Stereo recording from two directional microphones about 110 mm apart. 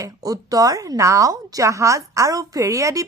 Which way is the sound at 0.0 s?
35° right (ahead or behind).